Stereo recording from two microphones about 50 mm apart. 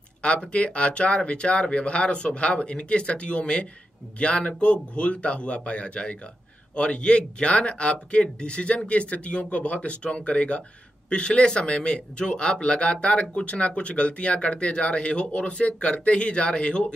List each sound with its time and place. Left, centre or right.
0.2 s speech: left